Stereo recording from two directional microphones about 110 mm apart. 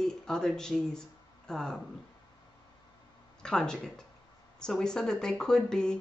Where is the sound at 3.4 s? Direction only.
5° left (ahead or behind).